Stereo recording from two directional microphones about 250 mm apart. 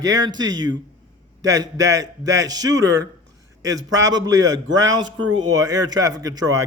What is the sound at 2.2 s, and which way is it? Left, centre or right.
Speech, right.